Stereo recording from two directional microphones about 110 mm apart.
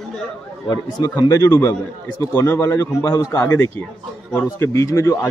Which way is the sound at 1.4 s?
25° left (ahead or behind).